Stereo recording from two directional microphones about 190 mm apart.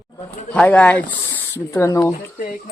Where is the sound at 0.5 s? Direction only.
5° left (ahead or behind).